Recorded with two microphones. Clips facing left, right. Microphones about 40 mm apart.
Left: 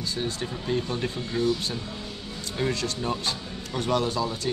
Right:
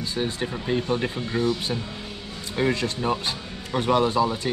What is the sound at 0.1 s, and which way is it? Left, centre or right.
Speech, right.